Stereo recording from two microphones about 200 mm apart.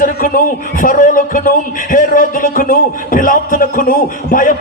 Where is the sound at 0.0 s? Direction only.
45° left (ahead or behind).